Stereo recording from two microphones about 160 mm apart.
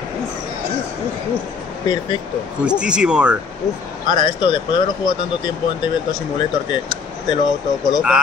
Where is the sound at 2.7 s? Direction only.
5° right (ahead or behind).